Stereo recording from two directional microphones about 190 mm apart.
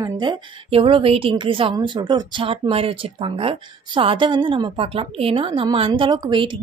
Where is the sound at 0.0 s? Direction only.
25° right (ahead or behind).